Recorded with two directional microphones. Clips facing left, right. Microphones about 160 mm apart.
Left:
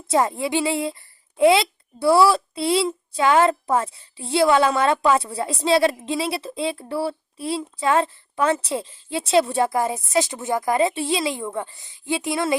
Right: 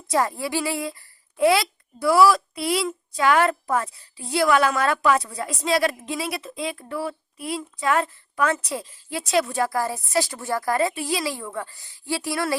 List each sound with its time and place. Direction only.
0.1 s a woman's voice: 20° left (ahead or behind)